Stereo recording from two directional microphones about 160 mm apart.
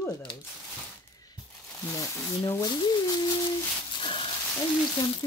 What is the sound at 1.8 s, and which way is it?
Speech, 15° left (ahead or behind).